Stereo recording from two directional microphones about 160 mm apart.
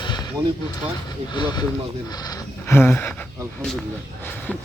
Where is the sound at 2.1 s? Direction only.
25° left (ahead or behind).